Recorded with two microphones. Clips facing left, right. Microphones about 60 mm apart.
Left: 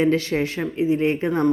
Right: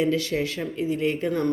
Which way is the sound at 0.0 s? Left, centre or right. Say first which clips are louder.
Left 4 dB; left.